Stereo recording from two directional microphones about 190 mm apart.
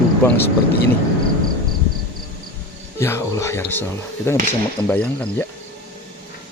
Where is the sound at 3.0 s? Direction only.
15° left (ahead or behind).